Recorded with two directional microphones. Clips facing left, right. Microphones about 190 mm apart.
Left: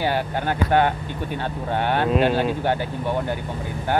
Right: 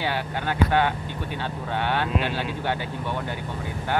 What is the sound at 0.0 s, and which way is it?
Speech, 45° left (ahead or behind).